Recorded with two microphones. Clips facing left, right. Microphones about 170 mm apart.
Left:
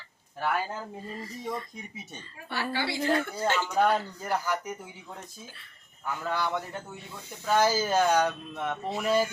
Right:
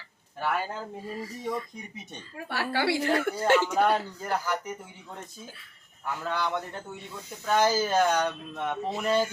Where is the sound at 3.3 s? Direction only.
60° right (ahead or behind).